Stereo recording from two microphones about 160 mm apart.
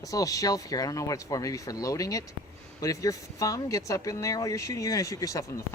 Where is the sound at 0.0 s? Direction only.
20° left (ahead or behind).